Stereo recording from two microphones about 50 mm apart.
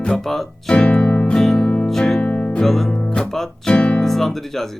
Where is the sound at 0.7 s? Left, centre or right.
Centre.